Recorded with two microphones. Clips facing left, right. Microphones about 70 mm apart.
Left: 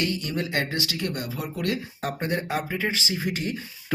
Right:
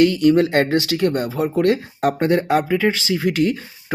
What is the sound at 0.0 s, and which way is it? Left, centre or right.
Speech, right.